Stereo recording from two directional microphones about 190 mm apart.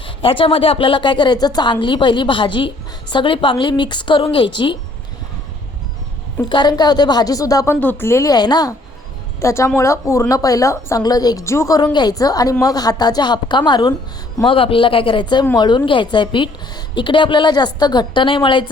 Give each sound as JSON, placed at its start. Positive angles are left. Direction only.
{"t": 0.2, "sound": "a woman's voice", "side_deg": 25}
{"t": 6.5, "sound": "a woman's voice", "side_deg": 20}